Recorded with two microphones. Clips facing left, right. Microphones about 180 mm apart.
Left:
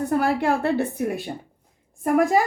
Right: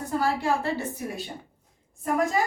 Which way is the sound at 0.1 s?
60° left (ahead or behind).